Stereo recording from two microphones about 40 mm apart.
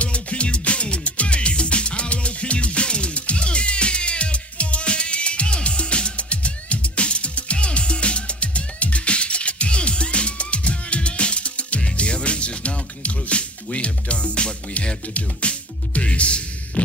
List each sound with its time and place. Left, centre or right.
0.0 s music: left